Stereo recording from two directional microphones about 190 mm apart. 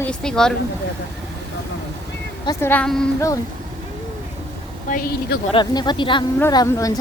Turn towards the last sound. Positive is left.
turn(degrees=20)  # may be behind; listen again after turning